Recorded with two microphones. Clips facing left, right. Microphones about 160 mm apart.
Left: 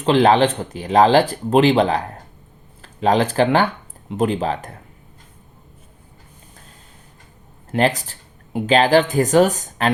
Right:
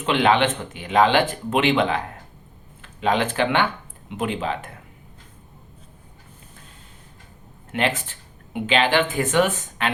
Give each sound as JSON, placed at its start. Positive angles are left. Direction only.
{"t": 0.0, "sound": "speech", "side_deg": 35}
{"t": 7.7, "sound": "speech", "side_deg": 40}